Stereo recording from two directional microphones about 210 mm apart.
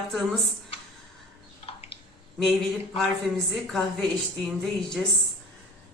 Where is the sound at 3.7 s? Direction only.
Centre (ahead or behind).